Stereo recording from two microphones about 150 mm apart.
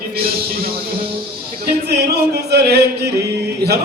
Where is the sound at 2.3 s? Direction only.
90° right.